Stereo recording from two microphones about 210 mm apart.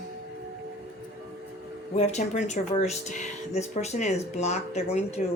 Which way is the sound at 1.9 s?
35° left (ahead or behind).